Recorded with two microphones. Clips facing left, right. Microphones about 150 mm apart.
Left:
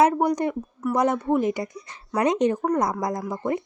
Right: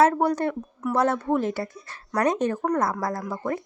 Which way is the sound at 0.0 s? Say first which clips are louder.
Even; 15° left (ahead or behind).